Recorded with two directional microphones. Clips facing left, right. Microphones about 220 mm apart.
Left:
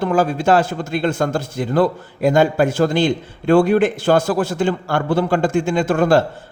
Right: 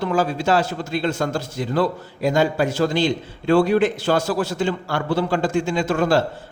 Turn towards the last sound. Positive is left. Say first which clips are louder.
# left 4 dB
turn(degrees=50)  # may be behind; listen again after turning